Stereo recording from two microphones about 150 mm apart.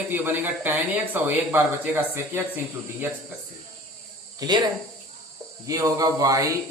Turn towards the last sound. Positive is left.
turn(degrees=-20)  # may be behind; listen again after turning